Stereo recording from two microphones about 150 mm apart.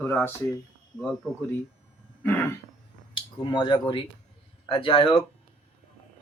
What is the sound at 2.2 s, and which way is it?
Throat clearing, 10° left (ahead or behind).